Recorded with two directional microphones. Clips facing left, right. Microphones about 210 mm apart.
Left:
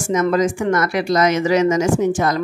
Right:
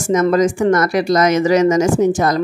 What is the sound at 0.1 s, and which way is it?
Speech, 45° right (ahead or behind).